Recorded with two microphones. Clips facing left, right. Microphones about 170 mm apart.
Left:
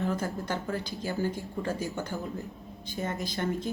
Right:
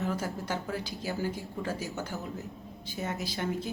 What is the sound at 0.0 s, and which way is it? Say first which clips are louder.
A woman's voice: left 2 dB; 10° right (ahead or behind).